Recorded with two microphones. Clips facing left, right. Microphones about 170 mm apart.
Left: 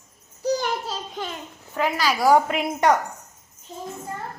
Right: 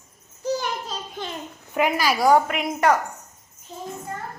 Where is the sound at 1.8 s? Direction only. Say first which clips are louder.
Right 2 dB; 15° right (ahead or behind).